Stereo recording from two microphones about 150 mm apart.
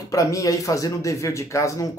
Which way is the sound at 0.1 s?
20° left (ahead or behind).